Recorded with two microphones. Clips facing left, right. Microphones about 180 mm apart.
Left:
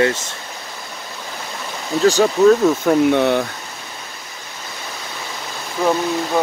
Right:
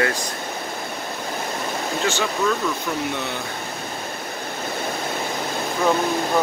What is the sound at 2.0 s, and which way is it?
Speech, 40° left (ahead or behind).